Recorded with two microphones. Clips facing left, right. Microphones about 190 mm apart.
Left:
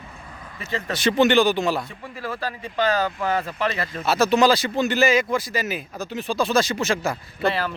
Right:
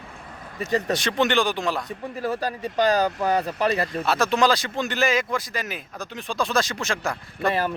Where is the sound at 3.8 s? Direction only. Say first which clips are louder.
Left 2 dB; centre (ahead or behind).